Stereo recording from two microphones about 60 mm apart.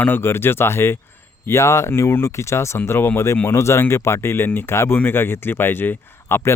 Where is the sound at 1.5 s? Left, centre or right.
Left.